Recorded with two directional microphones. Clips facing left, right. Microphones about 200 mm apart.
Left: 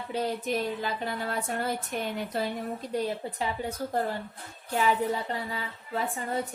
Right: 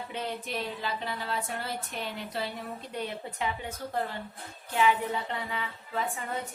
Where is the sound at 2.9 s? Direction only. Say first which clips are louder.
Left 6 dB; 35° left (ahead or behind).